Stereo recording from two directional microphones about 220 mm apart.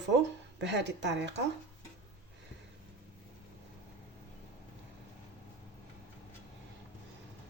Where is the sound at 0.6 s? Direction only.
55° right (ahead or behind).